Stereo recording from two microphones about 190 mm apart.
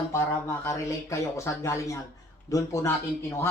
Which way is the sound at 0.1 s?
15° left (ahead or behind).